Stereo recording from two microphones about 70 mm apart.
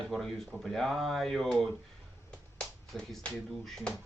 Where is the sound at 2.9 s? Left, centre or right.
Centre.